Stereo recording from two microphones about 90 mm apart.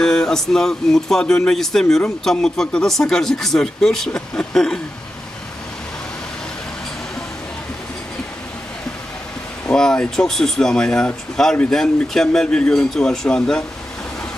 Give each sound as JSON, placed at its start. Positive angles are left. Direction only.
{"t": 0.0, "sound": "speech", "side_deg": 5}
{"t": 9.7, "sound": "speech", "side_deg": 10}